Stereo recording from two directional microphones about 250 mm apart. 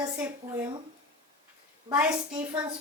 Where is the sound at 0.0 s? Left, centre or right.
Centre.